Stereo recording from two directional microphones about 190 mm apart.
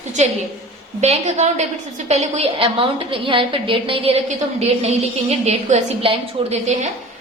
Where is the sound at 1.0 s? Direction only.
35° right (ahead or behind).